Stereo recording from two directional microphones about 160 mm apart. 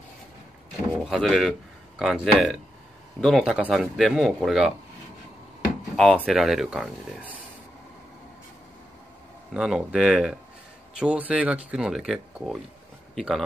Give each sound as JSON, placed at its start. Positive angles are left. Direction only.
{"t": 1.0, "sound": "speech", "side_deg": 0}
{"t": 5.9, "sound": "speech", "side_deg": 0}
{"t": 9.5, "sound": "a man's voice", "side_deg": -5}